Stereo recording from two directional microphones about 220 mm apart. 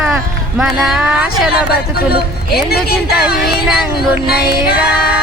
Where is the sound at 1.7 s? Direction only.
45° left (ahead or behind).